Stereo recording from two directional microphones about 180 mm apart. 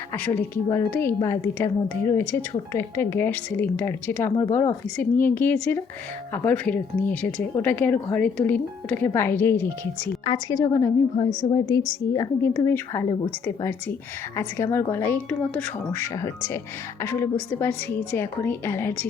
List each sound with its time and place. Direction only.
0.1 s a woman's voice: 10° left (ahead or behind)